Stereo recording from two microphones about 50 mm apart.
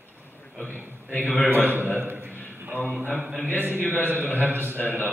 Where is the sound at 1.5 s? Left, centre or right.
Right.